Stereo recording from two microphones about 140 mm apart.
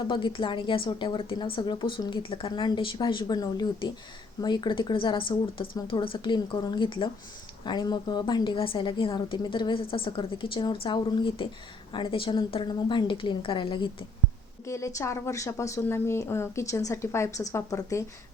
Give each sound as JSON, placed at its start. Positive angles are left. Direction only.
{"t": 0.1, "sound": "a woman's voice", "side_deg": 35}
{"t": 14.7, "sound": "a woman's voice", "side_deg": 20}